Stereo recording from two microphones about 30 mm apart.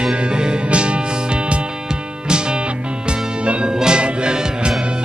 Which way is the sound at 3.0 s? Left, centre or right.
Right.